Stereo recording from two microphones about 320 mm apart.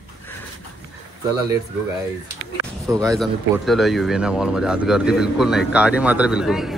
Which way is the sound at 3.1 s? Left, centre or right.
Centre.